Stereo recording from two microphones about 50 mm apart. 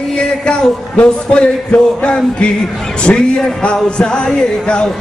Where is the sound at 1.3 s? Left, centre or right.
Left.